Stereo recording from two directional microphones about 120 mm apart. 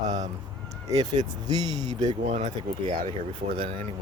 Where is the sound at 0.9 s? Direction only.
35° right (ahead or behind).